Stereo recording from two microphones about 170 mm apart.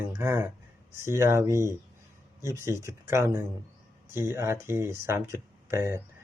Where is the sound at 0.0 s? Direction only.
15° right (ahead or behind).